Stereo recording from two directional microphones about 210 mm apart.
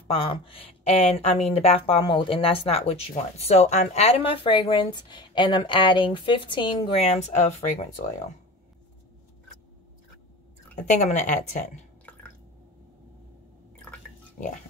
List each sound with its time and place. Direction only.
0.1 s a woman's voice: 25° left (ahead or behind)
10.8 s speech: 35° left (ahead or behind)
14.4 s speech: 35° left (ahead or behind)